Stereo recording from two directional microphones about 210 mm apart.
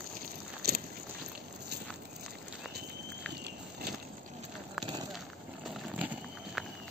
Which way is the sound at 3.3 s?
55° right (ahead or behind).